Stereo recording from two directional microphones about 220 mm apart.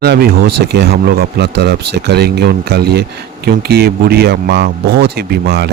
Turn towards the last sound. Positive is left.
turn(degrees=-45)  # may be behind; listen again after turning